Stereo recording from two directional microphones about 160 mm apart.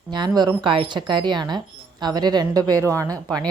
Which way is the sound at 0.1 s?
30° right (ahead or behind).